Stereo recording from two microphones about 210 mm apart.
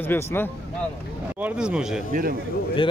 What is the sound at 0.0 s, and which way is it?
Speech, 10° left (ahead or behind).